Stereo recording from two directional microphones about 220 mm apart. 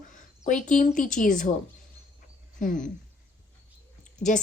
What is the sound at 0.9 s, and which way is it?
Speech, 35° left (ahead or behind).